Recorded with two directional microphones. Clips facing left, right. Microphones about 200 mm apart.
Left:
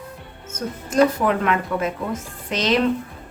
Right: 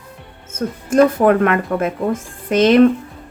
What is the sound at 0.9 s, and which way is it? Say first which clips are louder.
A woman's voice: right 6 dB; 50° right (ahead or behind).